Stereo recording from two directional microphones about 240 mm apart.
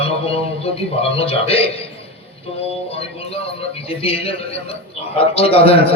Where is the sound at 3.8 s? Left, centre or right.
Left.